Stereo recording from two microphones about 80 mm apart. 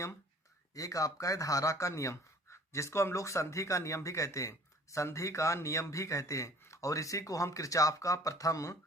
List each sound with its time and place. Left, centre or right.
0.7 s speech: left